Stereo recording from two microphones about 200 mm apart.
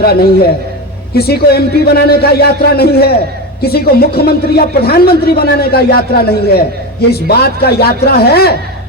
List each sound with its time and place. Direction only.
0.0 s speech: 50° left (ahead or behind)